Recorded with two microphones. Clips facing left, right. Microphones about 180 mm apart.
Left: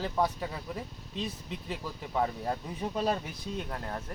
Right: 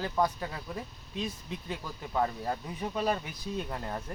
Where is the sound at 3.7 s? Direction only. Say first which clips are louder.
Right 1 dB; 5° right (ahead or behind).